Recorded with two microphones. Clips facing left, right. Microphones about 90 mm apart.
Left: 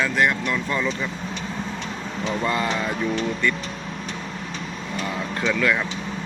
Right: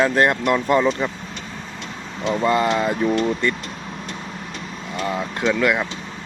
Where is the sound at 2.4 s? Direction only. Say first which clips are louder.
Right 7 dB; 25° right (ahead or behind).